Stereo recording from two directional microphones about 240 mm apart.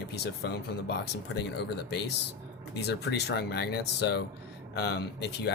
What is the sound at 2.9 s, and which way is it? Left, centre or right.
Speech, left.